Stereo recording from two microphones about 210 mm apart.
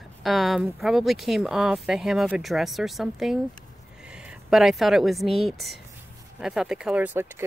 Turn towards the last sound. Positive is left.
turn(degrees=-10)  # may be behind; listen again after turning